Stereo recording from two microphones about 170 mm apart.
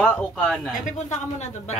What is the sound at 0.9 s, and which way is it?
Speech, 45° left (ahead or behind).